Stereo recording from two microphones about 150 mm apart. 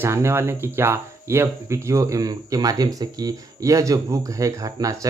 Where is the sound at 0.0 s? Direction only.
15° right (ahead or behind).